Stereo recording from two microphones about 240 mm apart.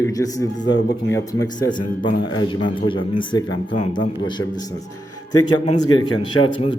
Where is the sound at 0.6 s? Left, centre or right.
Left.